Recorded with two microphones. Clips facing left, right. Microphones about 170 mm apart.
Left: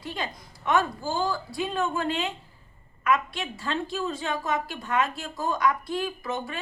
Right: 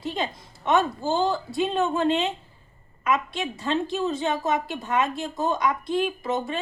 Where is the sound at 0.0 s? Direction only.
20° right (ahead or behind).